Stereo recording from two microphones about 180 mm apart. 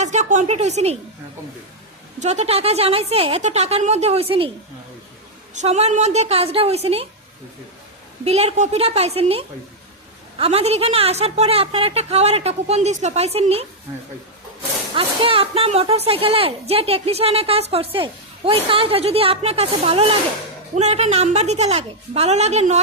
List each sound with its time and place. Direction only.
0.0 s a woman's voice: 40° right (ahead or behind)
2.1 s a woman's voice: 40° right (ahead or behind)
5.5 s a woman's voice: 35° right (ahead or behind)
8.2 s a woman's voice: 35° right (ahead or behind)
14.9 s a woman's voice: 30° right (ahead or behind)